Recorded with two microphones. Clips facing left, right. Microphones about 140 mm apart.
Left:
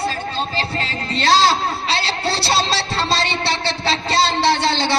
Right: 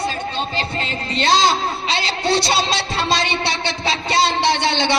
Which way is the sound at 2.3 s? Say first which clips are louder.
Right 2 dB; 35° left (ahead or behind).